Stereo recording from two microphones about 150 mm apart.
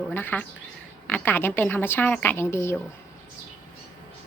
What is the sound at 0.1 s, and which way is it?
Speech, 15° left (ahead or behind).